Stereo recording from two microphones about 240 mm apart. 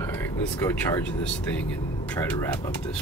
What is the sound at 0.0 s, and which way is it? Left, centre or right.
Speech, centre.